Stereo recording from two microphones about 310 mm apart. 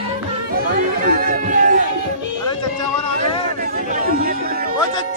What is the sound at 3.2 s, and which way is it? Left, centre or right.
Music, right.